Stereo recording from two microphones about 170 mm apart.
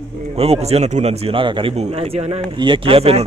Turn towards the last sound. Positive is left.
turn(degrees=-35)  # may be behind; listen again after turning